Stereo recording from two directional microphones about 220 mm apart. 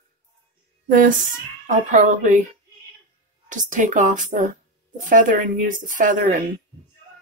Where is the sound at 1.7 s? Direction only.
35° right (ahead or behind).